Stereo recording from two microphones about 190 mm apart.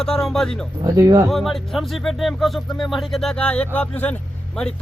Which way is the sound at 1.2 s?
Centre (ahead or behind).